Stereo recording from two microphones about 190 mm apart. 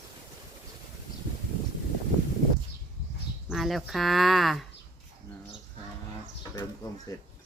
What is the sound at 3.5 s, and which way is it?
Speech, centre (ahead or behind).